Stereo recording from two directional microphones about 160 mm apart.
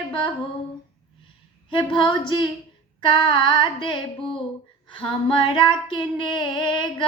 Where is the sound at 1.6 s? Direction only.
30° left (ahead or behind).